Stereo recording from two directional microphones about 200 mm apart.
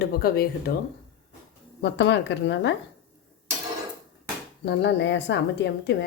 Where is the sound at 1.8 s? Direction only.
60° left (ahead or behind).